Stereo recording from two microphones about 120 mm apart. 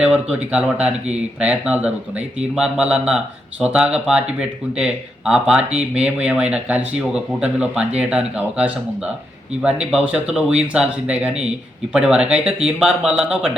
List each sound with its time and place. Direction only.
0.0 s speech: 10° right (ahead or behind)